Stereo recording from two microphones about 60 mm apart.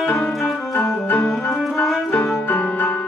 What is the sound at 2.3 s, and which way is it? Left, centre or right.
Music, left.